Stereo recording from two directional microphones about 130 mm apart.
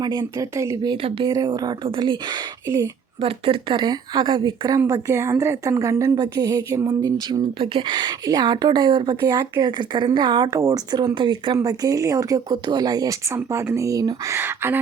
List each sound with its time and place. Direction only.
0.0 s a woman's voice: 30° right (ahead or behind)
4.9 s speech: 25° right (ahead or behind)
7.3 s a woman's voice: 35° right (ahead or behind)
14.3 s speech: 15° right (ahead or behind)